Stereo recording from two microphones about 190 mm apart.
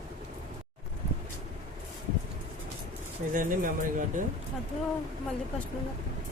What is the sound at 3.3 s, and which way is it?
Speech, 45° right (ahead or behind).